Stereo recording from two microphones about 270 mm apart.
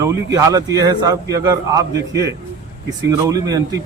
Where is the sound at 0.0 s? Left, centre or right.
Centre.